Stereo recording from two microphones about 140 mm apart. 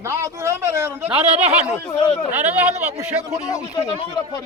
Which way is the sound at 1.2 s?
50° right (ahead or behind).